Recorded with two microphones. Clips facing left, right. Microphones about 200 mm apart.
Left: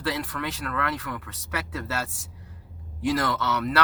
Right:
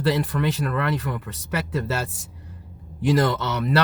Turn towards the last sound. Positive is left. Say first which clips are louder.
# right 3 dB
turn(degrees=-25)  # may be behind; listen again after turning